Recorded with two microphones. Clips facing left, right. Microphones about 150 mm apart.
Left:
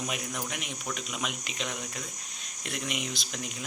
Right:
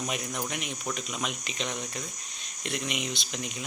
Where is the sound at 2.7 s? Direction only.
5° left (ahead or behind).